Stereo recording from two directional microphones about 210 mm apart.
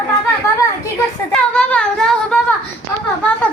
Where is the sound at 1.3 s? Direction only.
5° left (ahead or behind).